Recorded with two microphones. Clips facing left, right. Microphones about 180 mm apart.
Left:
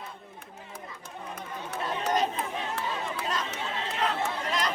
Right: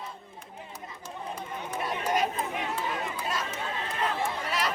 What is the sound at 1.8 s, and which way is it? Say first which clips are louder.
Chatter: left 1 dB; 10° right (ahead or behind).